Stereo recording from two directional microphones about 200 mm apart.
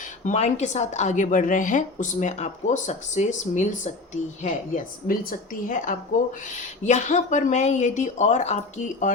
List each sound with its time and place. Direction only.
0.3 s a woman's voice: 35° left (ahead or behind)